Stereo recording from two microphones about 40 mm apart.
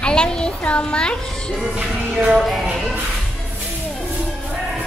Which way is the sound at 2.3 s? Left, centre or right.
Centre.